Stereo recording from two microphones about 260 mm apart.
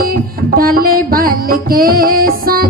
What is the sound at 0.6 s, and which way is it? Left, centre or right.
Music, right.